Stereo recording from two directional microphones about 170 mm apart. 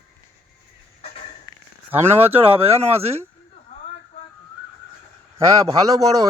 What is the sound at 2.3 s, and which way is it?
Speech, 35° right (ahead or behind).